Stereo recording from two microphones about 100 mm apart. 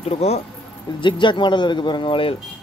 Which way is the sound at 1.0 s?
55° left (ahead or behind).